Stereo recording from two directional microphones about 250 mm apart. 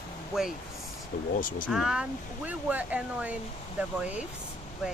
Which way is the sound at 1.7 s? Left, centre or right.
Centre.